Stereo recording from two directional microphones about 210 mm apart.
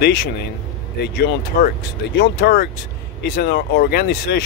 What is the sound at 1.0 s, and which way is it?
Speech, 45° left (ahead or behind).